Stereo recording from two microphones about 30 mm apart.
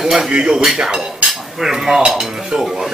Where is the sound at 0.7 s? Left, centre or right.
Right.